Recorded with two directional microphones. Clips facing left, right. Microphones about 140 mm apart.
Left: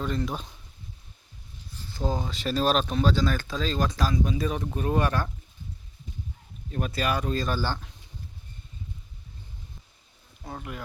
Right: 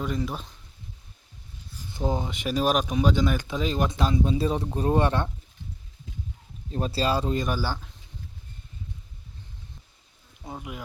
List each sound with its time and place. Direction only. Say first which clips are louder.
0.0 s speech: even; 10° right (ahead or behind)
1.8 s speech: right 2 dB; 20° right (ahead or behind)
6.7 s speech: right 2 dB; 30° right (ahead or behind); by 7.9 s 5° right (ahead or behind)
10.4 s speech: even; 10° right (ahead or behind)